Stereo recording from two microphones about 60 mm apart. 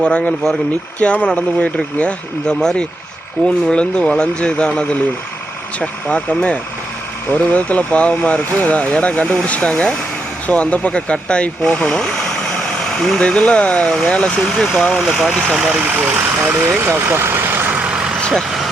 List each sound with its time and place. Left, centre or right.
0.0 s speech: centre
14.4 s speech: centre
16.0 s speech: right
17.5 s vehicle: right
17.7 s vehicle: centre
18.2 s vehicle: centre